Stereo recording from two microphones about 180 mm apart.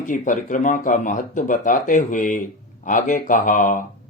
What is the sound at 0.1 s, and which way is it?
Speech, 45° left (ahead or behind).